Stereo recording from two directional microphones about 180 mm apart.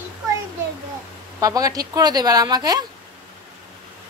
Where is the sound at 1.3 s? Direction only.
20° right (ahead or behind).